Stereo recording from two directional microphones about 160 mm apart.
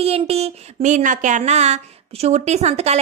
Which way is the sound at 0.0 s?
40° right (ahead or behind).